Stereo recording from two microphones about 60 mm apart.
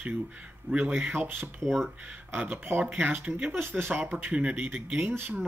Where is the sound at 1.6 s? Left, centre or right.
Centre.